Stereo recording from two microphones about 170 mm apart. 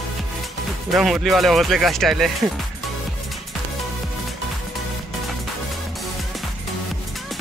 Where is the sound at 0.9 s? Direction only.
Centre (ahead or behind).